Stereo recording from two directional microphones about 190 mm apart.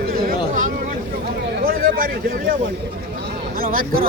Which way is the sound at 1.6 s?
50° right (ahead or behind).